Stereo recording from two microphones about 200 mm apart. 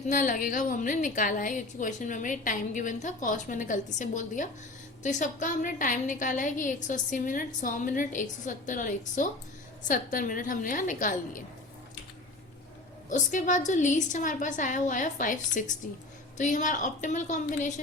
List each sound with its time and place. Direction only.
0.1 s a woman's voice: 40° left (ahead or behind)
13.1 s a woman's voice: 40° left (ahead or behind)